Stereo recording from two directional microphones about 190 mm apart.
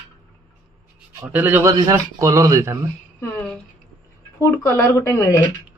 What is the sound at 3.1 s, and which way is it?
A woman's voice, 15° left (ahead or behind).